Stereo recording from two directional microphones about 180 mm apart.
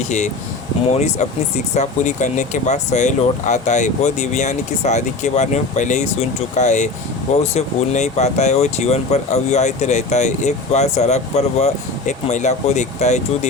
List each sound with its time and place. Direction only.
0.9 s speech: 35° left (ahead or behind)